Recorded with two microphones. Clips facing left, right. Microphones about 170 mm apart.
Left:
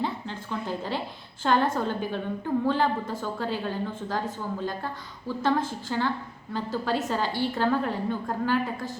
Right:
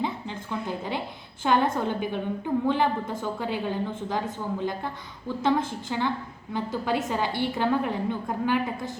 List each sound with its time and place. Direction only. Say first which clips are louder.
1.5 s a woman's voice: right 1 dB; 15° right (ahead or behind)
5.4 s a woman's voice: right 1 dB; 20° right (ahead or behind)